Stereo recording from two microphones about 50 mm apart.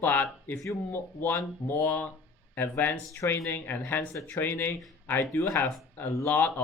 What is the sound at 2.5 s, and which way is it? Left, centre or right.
Speech, left.